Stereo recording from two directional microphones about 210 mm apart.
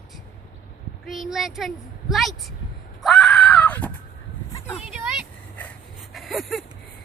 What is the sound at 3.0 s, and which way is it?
Screaming, 5° left (ahead or behind).